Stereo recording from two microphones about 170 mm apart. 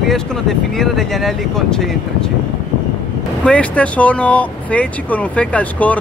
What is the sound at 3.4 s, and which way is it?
Speech, 5° left (ahead or behind).